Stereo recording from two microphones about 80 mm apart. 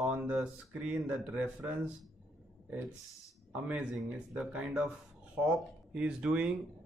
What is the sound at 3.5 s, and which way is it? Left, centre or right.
Speech, centre.